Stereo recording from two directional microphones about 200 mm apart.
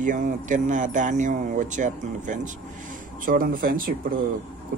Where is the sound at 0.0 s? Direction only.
40° right (ahead or behind).